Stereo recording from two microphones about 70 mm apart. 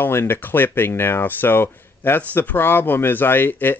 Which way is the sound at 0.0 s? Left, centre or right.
Left.